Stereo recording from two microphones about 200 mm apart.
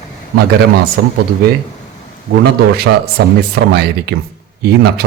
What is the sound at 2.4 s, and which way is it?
A man's voice, 50° right (ahead or behind).